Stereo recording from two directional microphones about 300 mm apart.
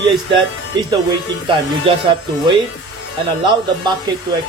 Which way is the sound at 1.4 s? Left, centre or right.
Centre.